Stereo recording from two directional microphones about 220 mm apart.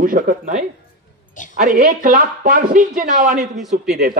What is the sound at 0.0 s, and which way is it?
Speech, 40° right (ahead or behind).